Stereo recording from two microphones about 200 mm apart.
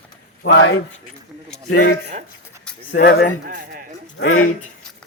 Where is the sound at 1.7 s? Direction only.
50° left (ahead or behind).